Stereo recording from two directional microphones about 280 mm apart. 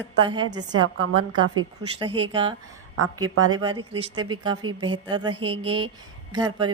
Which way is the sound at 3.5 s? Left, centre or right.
Centre.